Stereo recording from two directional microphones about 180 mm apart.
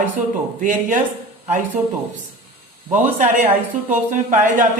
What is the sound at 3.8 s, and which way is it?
Speech, 45° right (ahead or behind).